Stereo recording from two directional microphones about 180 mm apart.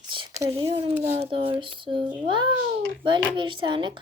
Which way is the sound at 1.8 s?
30° right (ahead or behind).